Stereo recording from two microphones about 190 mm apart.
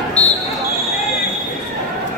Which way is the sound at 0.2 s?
5° left (ahead or behind).